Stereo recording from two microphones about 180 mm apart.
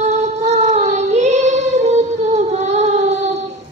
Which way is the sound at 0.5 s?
40° right (ahead or behind).